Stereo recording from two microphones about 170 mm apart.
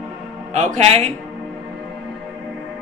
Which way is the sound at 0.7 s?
40° right (ahead or behind).